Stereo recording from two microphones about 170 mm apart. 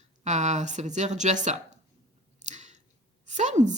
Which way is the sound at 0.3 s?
45° right (ahead or behind).